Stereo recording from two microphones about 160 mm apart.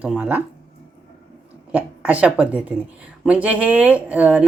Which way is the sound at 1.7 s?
10° right (ahead or behind).